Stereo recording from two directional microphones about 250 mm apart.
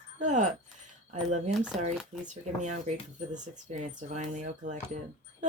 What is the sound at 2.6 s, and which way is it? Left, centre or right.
Speech, right.